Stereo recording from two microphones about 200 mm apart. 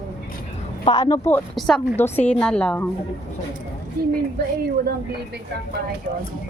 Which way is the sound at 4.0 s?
50° right (ahead or behind).